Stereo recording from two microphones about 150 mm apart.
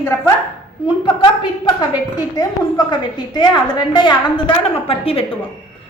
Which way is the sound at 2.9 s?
30° left (ahead or behind).